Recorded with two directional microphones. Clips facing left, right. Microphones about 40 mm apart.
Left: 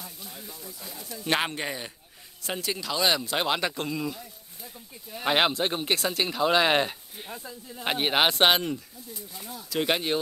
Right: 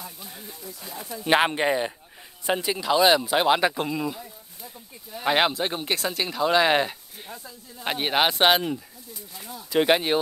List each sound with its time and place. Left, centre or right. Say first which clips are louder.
0.0 s speech: right 2 dB; centre
1.0 s speech: right 6 dB; centre